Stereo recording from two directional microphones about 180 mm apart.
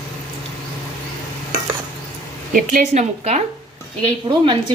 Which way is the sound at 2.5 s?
45° right (ahead or behind).